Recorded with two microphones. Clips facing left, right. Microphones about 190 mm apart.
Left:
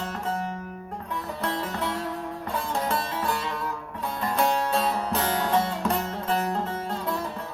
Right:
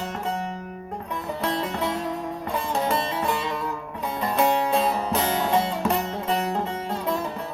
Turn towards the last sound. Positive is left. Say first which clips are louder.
# right 3 dB
turn(degrees=-20)  # may be behind; listen again after turning